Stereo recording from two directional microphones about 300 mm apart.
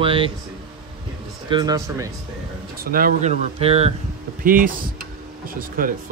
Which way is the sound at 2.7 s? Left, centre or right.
Right.